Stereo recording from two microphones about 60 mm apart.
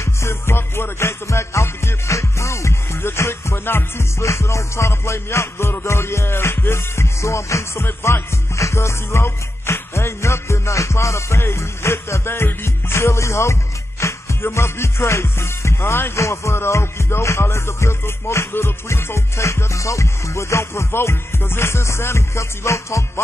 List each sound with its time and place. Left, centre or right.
0.0 s music: left
4.2 s music: left
7.8 s music: left
8.5 s music: left
16.2 s music: left